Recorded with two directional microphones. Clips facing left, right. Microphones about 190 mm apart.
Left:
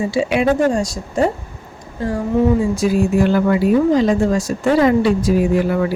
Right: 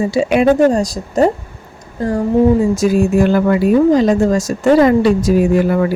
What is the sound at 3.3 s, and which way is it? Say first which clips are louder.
A woman's voice: right 3 dB; 45° right (ahead or behind).